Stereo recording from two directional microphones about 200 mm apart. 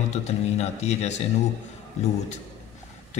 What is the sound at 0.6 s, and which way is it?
Speech, 35° left (ahead or behind).